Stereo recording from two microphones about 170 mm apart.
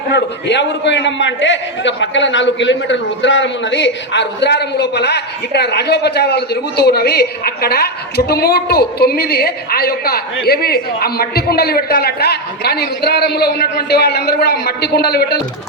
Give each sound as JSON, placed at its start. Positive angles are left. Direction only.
{"t": 0.1, "sound": "a man's voice", "side_deg": 90}